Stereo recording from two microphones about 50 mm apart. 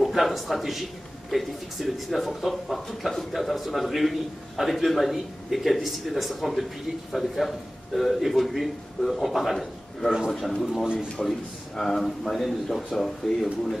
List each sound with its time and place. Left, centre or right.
0.0 s speech: centre